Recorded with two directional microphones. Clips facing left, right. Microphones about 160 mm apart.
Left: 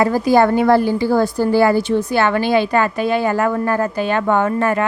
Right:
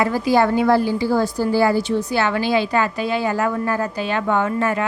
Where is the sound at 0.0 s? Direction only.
45° left (ahead or behind).